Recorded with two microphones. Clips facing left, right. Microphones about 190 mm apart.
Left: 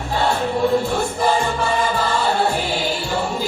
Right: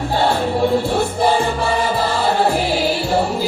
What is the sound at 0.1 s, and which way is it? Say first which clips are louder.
Music: right 1 dB; 35° right (ahead or behind).